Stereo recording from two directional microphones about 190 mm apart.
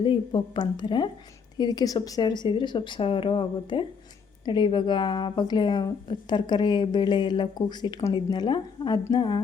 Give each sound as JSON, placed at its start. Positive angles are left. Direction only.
{"t": 0.0, "sound": "a woman's voice", "side_deg": 25}